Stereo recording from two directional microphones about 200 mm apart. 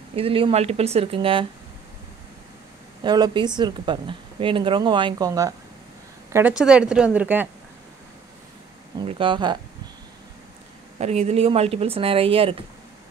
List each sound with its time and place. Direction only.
0.1 s speech: 25° right (ahead or behind)
3.0 s speech: 20° right (ahead or behind)
6.3 s a woman's voice: 5° right (ahead or behind)
9.0 s speech: 25° right (ahead or behind)
11.0 s speech: 35° right (ahead or behind)